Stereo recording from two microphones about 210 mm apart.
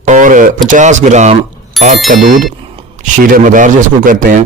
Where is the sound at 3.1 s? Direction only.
40° right (ahead or behind).